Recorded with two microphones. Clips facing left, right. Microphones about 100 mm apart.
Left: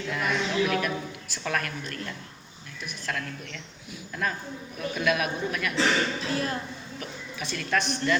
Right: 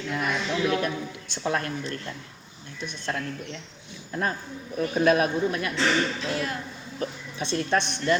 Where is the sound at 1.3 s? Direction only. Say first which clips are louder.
Right 3 dB; 25° right (ahead or behind).